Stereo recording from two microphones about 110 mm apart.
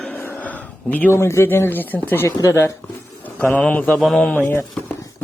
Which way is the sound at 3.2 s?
15° left (ahead or behind).